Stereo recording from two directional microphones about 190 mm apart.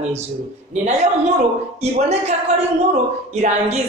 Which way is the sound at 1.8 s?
35° right (ahead or behind).